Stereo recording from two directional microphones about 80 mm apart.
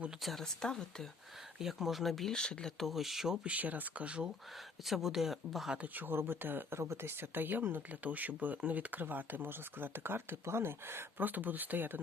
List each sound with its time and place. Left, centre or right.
0.2 s speech: centre
1.5 s speech: centre
3.4 s speech: centre
4.9 s speech: centre
5.7 s speech: right